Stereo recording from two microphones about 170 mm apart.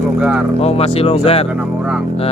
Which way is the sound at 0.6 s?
35° left (ahead or behind).